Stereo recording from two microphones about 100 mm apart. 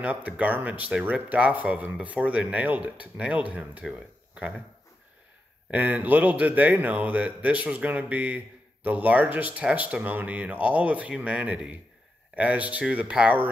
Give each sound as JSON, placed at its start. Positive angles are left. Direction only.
{"t": 0.0, "sound": "speech", "side_deg": -15}
{"t": 5.7, "sound": "speech", "side_deg": -15}